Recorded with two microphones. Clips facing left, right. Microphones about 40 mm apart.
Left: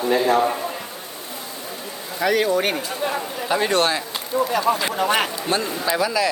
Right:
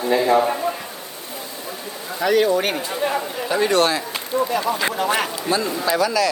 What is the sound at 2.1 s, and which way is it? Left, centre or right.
Speech, centre.